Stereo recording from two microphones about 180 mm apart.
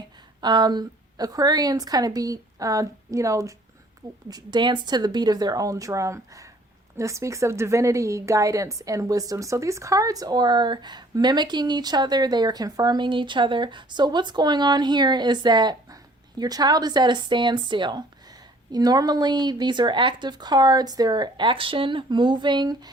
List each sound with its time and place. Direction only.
0.4 s a woman's voice: 25° right (ahead or behind)